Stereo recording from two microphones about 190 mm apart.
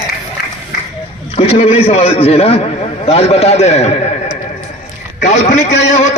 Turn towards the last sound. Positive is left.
turn(degrees=35)  # may be behind; listen again after turning